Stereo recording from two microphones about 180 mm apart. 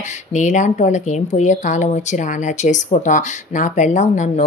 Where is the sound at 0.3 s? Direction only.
45° left (ahead or behind).